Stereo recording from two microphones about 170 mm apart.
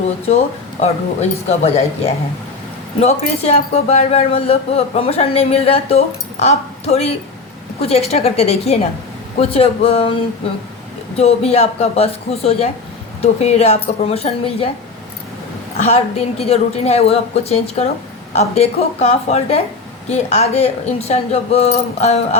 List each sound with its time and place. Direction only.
0.8 s speech: 40° left (ahead or behind)
3.0 s speech: 40° left (ahead or behind)
15.8 s speech: 40° left (ahead or behind)